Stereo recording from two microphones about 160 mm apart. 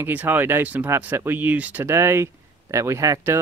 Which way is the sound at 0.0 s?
10° right (ahead or behind).